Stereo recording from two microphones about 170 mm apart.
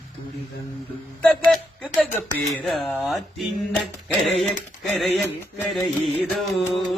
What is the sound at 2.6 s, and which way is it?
Music, centre (ahead or behind).